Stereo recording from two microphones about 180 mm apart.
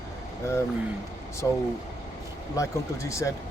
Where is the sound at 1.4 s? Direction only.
15° left (ahead or behind).